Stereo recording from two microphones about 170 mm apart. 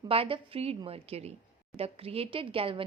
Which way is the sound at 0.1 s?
35° right (ahead or behind).